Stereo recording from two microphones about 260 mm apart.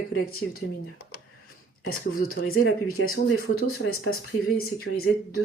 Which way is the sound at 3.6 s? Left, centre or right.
Left.